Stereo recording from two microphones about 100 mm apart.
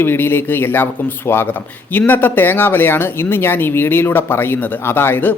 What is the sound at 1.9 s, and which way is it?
Speech, 20° left (ahead or behind).